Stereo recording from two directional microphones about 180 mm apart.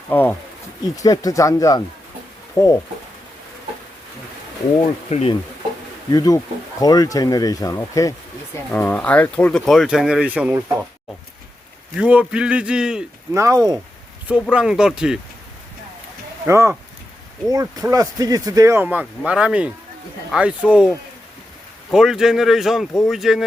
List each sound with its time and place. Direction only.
0.1 s speech: 10° left (ahead or behind)
5.0 s speech: 40° left (ahead or behind)
6.1 s speech: 20° left (ahead or behind); by 10.6 s 10° right (ahead or behind)
11.9 s speech: 5° right (ahead or behind)
13.3 s speech: 20° right (ahead or behind)
14.5 s speech: 5° right (ahead or behind)
16.5 s speech: 15° right (ahead or behind)